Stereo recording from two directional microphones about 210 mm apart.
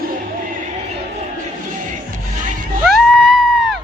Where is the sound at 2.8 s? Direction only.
Centre (ahead or behind).